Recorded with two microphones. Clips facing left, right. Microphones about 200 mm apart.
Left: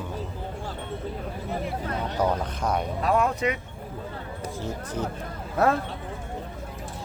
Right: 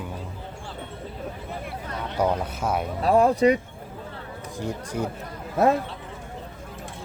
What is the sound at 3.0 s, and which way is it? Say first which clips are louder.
Speech: right 7 dB; 35° right (ahead or behind).